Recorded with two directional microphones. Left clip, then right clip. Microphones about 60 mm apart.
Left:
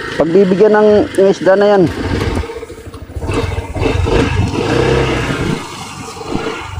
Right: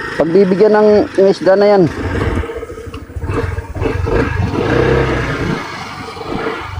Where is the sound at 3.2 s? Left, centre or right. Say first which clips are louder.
Left 2 dB; left.